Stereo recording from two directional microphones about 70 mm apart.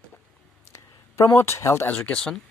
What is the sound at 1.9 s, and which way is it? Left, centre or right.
Speech, centre.